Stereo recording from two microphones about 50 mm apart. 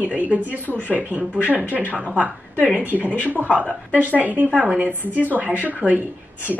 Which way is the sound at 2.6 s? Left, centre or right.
Right.